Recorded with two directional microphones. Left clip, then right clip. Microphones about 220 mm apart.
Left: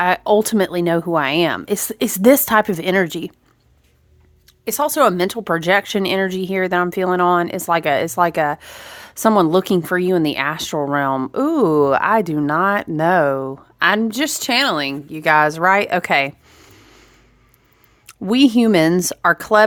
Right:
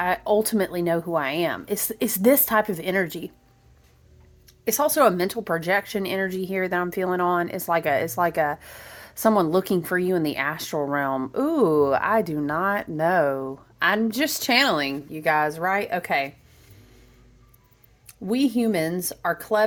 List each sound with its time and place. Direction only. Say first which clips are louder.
0.0 s speech: left 7 dB; 25° left (ahead or behind)
4.6 s speech: left 4 dB; 15° left (ahead or behind); by 16.6 s 35° left (ahead or behind)
16.7 s a sound: left 8 dB; 45° left (ahead or behind)
18.0 s speech: left 9 dB; 35° left (ahead or behind)